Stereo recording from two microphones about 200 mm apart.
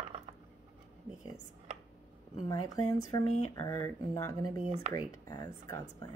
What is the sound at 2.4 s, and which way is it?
Speech, 20° left (ahead or behind).